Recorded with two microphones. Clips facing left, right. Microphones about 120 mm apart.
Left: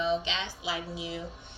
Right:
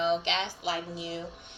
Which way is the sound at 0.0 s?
55° right (ahead or behind).